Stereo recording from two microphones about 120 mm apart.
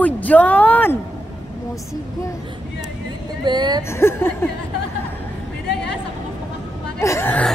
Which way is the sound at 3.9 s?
20° left (ahead or behind).